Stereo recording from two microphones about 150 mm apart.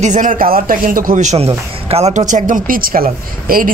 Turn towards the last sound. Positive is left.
turn(degrees=-75)  # may be behind; listen again after turning